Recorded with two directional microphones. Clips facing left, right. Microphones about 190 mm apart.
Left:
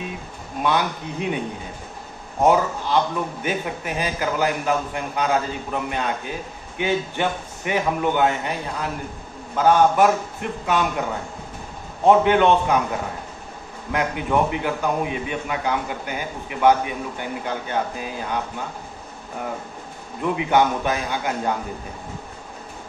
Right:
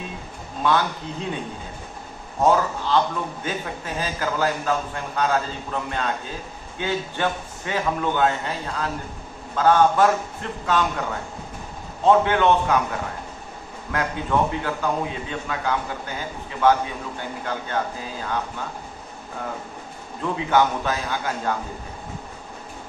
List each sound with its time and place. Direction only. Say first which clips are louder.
0.6 s a man's voice: even; 15° left (ahead or behind)
2.4 s a man's voice: left 1 dB; 15° left (ahead or behind)
13.9 s a man's voice: left 2 dB; 15° left (ahead or behind)
20.2 s a man's voice: left 1 dB; 15° left (ahead or behind)